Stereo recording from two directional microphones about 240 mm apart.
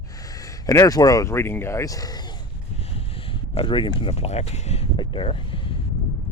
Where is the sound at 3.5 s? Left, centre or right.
Left.